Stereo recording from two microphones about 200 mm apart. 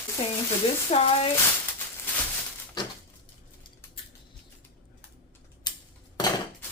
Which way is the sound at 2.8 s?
20° left (ahead or behind).